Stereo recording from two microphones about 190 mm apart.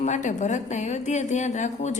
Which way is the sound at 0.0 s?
40° left (ahead or behind).